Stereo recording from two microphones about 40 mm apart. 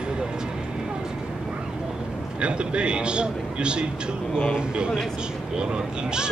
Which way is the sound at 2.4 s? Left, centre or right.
Right.